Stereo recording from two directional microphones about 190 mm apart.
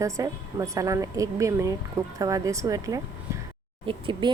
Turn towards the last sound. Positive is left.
turn(degrees=-25)  # may be behind; listen again after turning